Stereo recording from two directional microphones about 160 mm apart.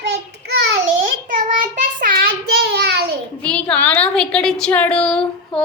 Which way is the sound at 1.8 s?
60° right (ahead or behind).